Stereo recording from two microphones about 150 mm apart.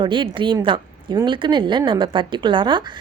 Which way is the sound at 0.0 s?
35° right (ahead or behind).